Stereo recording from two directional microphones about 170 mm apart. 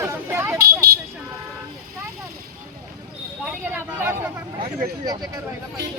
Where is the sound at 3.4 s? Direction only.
10° right (ahead or behind).